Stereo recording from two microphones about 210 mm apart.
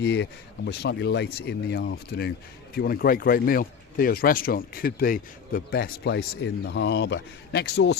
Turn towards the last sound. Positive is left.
turn(degrees=55)  # may be behind; listen again after turning